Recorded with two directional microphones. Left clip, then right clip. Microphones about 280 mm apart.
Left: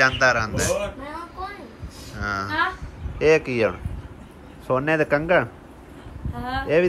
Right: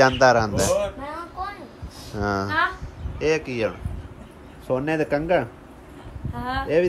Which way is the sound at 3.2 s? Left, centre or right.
Centre.